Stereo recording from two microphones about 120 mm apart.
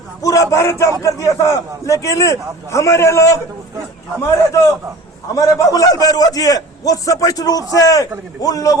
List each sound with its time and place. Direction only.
0.2 s a man's voice: 30° left (ahead or behind)